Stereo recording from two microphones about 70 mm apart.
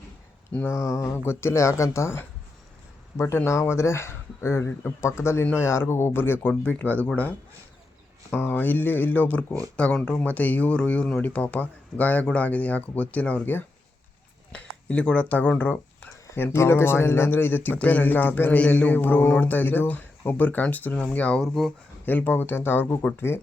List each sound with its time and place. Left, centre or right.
0.7 s speech: left
3.2 s speech: left
8.3 s speech: left
14.5 s speech: centre
21.4 s speech: centre
22.0 s speech: left